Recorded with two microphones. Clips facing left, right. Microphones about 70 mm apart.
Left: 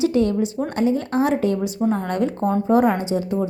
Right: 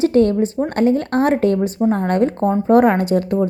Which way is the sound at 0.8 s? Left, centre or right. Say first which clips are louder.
Right 4 dB; right.